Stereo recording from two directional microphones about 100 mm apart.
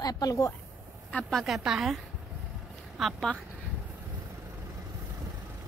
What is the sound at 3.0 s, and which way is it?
Speech, 5° left (ahead or behind).